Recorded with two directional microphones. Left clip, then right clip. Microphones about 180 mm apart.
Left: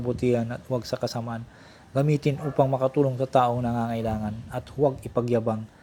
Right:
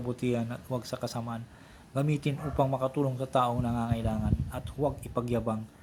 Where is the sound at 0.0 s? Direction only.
20° left (ahead or behind).